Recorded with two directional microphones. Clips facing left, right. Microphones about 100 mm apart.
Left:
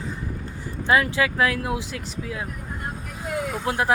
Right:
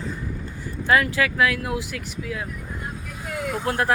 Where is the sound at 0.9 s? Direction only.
25° left (ahead or behind).